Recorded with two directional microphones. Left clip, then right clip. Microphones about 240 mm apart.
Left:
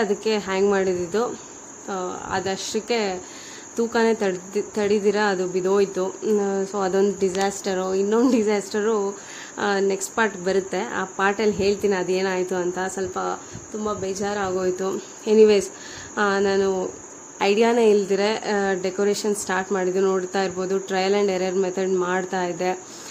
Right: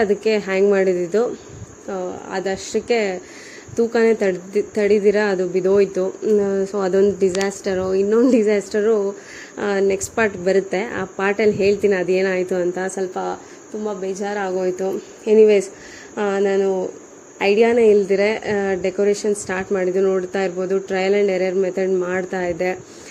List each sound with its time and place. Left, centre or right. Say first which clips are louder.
0.0 s speech: right 5 dB; centre